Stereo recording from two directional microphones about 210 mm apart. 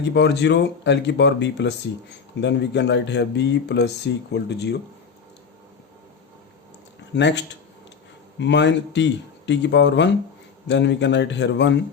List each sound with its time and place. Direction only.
0.0 s speech: 55° left (ahead or behind)
7.1 s speech: 55° left (ahead or behind)